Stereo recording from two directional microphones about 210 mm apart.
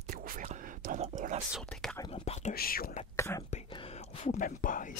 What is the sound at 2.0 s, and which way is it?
Whispering, 30° left (ahead or behind).